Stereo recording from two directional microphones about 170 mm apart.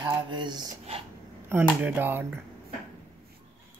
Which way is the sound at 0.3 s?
25° right (ahead or behind).